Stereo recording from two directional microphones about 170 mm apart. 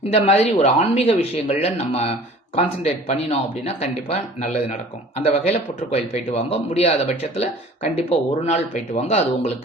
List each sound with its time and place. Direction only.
0.1 s speech: 40° left (ahead or behind)